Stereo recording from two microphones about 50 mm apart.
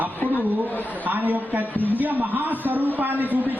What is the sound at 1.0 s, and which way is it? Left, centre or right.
A man's voice, right.